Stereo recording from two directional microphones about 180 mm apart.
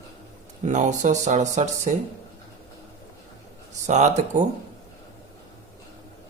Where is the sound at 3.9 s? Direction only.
40° right (ahead or behind).